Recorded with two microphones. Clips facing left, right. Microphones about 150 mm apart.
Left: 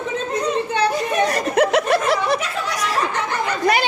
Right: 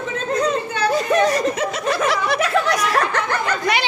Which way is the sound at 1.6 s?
65° left (ahead or behind).